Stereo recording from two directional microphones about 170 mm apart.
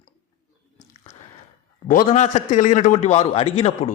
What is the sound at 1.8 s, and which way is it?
A man's voice, 50° left (ahead or behind).